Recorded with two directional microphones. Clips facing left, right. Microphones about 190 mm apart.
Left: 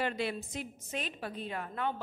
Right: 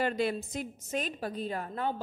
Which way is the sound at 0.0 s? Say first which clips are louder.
Right 4 dB; 40° right (ahead or behind).